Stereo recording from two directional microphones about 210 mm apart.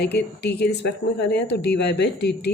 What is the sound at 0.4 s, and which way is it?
Speech, 50° left (ahead or behind).